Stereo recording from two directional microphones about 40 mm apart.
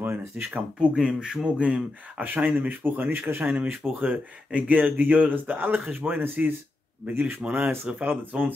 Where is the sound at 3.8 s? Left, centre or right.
Right.